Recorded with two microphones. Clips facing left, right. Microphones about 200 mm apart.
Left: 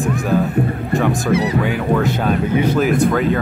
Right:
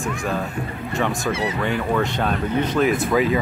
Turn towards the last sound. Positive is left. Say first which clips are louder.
# left 3 dB
turn(degrees=0)  # may be behind; listen again after turning